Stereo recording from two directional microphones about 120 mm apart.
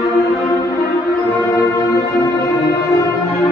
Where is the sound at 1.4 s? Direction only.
25° left (ahead or behind).